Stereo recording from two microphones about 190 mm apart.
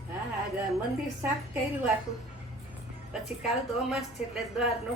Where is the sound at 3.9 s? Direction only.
Centre (ahead or behind).